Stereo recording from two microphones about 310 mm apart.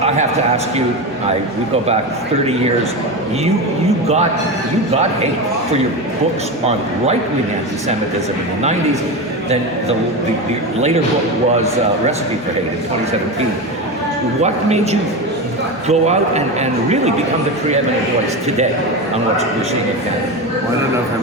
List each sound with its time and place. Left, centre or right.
0.0 s a man's voice: centre
14.4 s a man's voice: right